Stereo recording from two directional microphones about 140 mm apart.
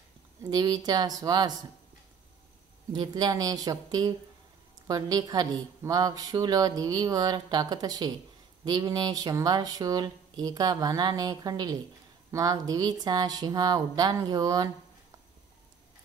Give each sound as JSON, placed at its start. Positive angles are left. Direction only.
{"t": 0.4, "sound": "a woman's voice", "side_deg": -30}
{"t": 2.9, "sound": "a woman's voice", "side_deg": -30}